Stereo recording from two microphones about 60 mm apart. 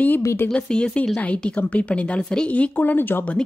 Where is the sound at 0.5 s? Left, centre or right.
Centre; by 3.3 s left.